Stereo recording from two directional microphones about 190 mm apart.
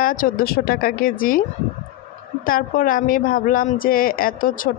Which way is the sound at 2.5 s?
50° left (ahead or behind).